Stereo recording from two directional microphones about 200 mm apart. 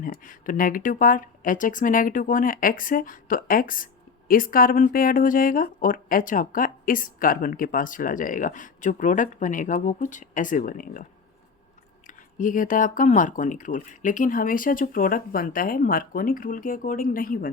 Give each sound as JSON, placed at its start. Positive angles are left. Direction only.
{"t": 0.0, "sound": "speech", "side_deg": 45}
{"t": 12.0, "sound": "speech", "side_deg": 40}